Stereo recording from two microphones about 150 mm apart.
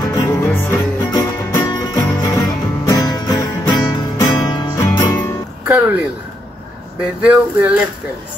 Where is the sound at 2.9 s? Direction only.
25° left (ahead or behind).